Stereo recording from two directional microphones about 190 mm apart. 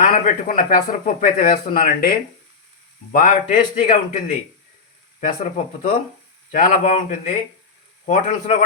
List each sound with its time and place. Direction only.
0.0 s speech: 45° left (ahead or behind)